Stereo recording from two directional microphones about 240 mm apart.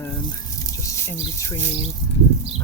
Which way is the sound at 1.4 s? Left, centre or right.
Centre.